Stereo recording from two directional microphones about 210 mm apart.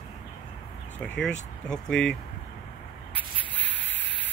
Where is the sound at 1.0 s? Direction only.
5° left (ahead or behind).